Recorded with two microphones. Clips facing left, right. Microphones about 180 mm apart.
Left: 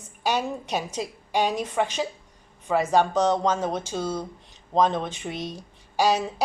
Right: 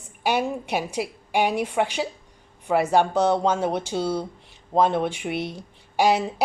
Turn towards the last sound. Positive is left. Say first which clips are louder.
# right 2 dB
turn(degrees=-15)  # may be behind; listen again after turning